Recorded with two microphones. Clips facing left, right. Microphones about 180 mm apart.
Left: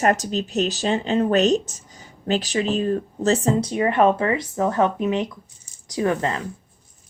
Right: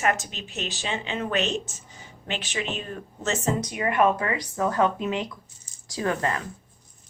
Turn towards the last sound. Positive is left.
turn(degrees=20)  # may be behind; listen again after turning